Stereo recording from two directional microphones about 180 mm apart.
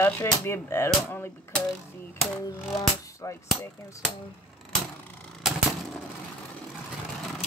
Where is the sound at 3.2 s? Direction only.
15° left (ahead or behind).